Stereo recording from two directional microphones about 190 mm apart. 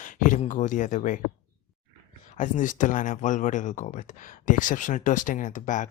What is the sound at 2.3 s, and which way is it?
Speech, 40° left (ahead or behind).